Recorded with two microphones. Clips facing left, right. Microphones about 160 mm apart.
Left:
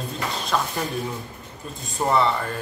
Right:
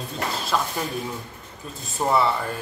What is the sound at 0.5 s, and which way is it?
Speech, 5° left (ahead or behind).